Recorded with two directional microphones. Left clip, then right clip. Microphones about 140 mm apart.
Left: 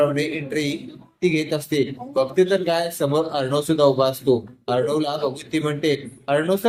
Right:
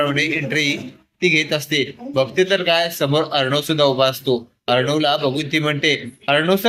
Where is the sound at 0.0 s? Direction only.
Centre (ahead or behind).